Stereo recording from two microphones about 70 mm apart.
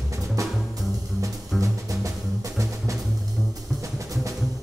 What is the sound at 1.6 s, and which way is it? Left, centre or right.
Music, right.